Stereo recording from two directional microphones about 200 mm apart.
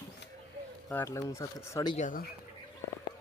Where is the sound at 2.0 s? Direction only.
40° left (ahead or behind).